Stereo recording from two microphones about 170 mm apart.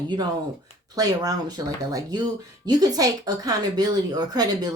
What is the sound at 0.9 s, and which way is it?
Speech, 20° right (ahead or behind).